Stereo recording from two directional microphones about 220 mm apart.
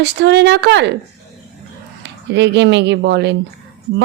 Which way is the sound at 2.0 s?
50° right (ahead or behind).